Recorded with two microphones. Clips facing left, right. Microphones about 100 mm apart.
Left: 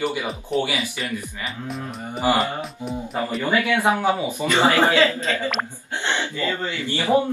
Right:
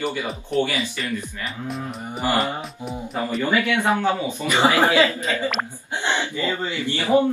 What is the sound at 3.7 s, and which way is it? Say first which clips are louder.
Speech: left 1 dB; 15° left (ahead or behind).